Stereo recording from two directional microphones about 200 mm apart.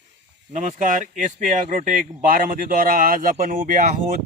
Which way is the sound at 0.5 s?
40° right (ahead or behind).